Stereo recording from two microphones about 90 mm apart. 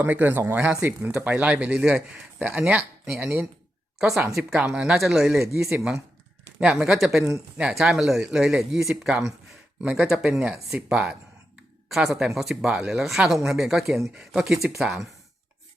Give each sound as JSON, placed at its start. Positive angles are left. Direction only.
{"t": 0.0, "sound": "speech", "side_deg": -20}